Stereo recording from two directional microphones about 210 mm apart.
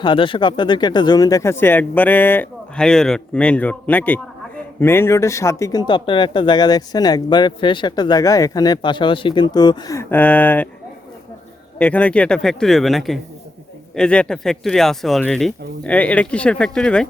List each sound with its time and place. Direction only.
0.0 s speech: 25° left (ahead or behind); by 10.7 s 10° left (ahead or behind)
11.8 s speech: 5° left (ahead or behind)